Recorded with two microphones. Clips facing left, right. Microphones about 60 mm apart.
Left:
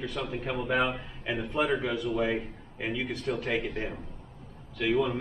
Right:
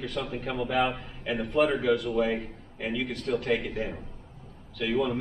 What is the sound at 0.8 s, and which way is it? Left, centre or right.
A man's voice, centre.